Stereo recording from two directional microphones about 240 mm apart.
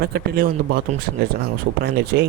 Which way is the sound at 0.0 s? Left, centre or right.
Right.